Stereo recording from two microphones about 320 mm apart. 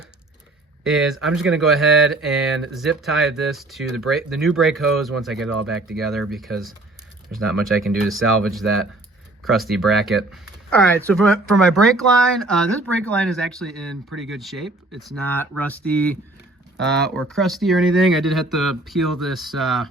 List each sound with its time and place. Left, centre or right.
0.9 s speech: centre
16.7 s speech: right
17.2 s speech: centre